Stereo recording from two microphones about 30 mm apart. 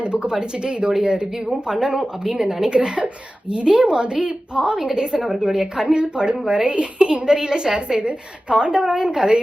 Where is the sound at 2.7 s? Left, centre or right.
Right.